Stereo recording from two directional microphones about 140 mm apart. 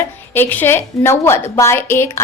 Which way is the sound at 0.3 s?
15° left (ahead or behind).